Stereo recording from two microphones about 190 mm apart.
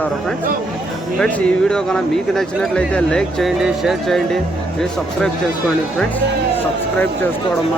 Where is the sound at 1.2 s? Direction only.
5° left (ahead or behind).